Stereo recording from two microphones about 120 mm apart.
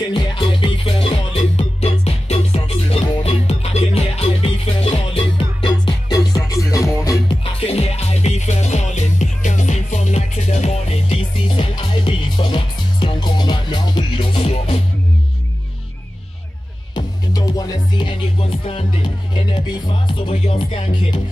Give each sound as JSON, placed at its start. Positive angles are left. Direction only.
{"t": 0.1, "sound": "music", "side_deg": 40}
{"t": 7.6, "sound": "music", "side_deg": 60}
{"t": 16.9, "sound": "music", "side_deg": 35}